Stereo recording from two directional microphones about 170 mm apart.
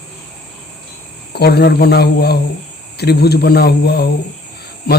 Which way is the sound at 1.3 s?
70° left (ahead or behind).